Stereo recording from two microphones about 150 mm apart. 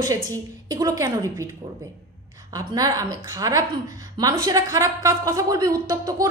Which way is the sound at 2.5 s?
25° right (ahead or behind).